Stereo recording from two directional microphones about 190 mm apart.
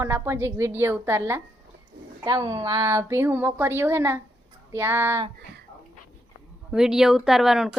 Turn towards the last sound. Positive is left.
turn(degrees=0)  # may be behind; listen again after turning